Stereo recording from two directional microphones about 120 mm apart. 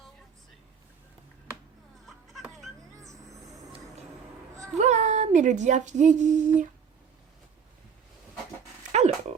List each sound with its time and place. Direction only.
2.0 s music: centre (ahead or behind)
4.8 s speech: 70° right (ahead or behind); by 6.4 s 90° right
8.9 s dog: 65° right (ahead or behind)